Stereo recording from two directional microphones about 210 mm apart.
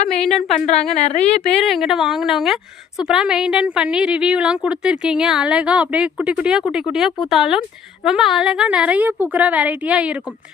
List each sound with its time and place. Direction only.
0.1 s a woman's voice: centre (ahead or behind)
0.5 s speech: 30° left (ahead or behind)
1.5 s a woman's voice: centre (ahead or behind)